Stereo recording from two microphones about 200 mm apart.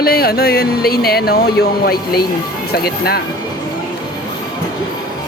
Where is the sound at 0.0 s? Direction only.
50° left (ahead or behind).